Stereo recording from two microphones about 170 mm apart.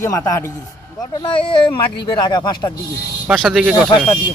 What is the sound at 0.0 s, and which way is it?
Speech, 15° left (ahead or behind).